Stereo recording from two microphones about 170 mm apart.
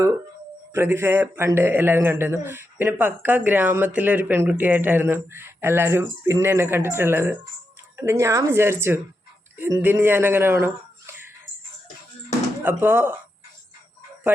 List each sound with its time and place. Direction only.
0.7 s speech: 15° right (ahead or behind)
12.6 s speech: 10° right (ahead or behind)